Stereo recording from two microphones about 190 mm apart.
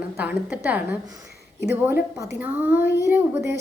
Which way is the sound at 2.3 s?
10° right (ahead or behind).